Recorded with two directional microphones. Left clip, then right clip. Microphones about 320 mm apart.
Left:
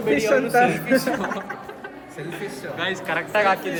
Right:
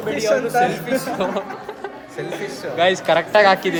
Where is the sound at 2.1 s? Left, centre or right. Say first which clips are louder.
Right 4 dB; centre.